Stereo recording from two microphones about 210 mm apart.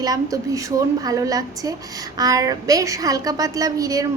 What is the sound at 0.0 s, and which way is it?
A woman's voice, 15° right (ahead or behind).